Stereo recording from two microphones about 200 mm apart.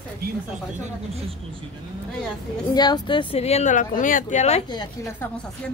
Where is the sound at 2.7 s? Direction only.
20° left (ahead or behind).